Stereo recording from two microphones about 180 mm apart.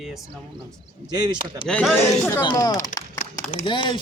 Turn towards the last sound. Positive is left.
turn(degrees=25)  # may be behind; listen again after turning